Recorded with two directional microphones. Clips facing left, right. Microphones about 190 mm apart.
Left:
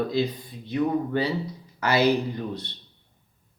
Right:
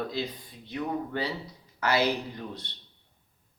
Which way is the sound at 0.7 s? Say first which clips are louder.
Left 7 dB; 15° left (ahead or behind).